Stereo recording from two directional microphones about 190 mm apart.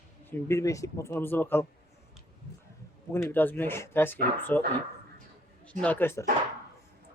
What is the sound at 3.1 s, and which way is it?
Speech, 10° left (ahead or behind).